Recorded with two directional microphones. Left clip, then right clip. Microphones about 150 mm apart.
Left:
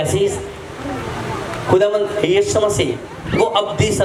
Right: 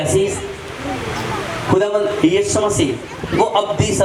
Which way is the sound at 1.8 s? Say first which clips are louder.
Even; 30° left (ahead or behind).